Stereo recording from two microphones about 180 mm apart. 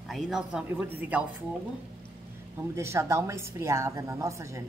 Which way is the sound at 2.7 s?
15° right (ahead or behind).